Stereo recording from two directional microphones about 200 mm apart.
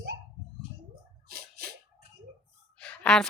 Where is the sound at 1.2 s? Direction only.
50° right (ahead or behind).